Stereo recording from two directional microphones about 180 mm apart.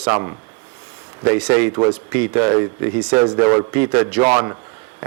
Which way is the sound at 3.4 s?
30° right (ahead or behind).